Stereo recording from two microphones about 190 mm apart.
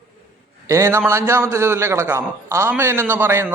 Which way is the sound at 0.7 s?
15° right (ahead or behind).